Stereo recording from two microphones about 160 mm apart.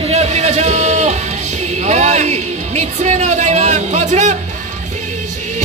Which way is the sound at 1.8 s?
45° right (ahead or behind).